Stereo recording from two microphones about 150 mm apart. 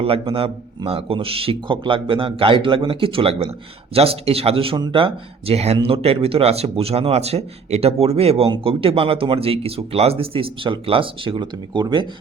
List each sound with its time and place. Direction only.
0.0 s speech: 40° right (ahead or behind)